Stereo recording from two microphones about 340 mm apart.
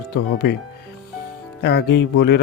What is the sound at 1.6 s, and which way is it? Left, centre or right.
Speech, left.